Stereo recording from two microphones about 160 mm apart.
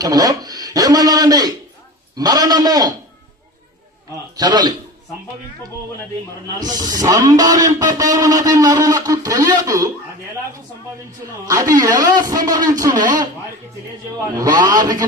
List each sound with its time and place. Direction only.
0.0 s a man's voice: 25° right (ahead or behind)
4.4 s speech: 25° right (ahead or behind)
6.6 s speech: 25° right (ahead or behind)
11.4 s speech: 20° right (ahead or behind)
14.3 s speech: 25° right (ahead or behind)